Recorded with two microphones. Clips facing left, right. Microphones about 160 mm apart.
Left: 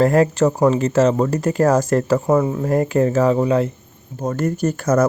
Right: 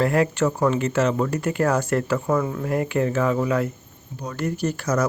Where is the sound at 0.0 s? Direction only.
40° left (ahead or behind).